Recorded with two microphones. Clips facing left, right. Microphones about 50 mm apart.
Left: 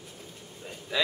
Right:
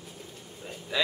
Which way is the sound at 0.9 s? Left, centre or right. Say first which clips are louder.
Even; centre.